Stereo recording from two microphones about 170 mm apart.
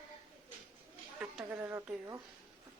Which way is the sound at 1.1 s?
10° right (ahead or behind).